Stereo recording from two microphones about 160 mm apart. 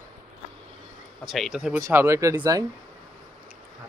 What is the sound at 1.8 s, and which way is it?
Speech, 15° right (ahead or behind).